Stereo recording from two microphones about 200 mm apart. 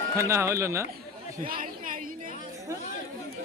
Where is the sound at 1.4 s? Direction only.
45° right (ahead or behind).